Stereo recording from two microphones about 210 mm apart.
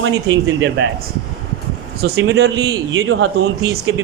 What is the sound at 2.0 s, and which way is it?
Speech, 50° right (ahead or behind).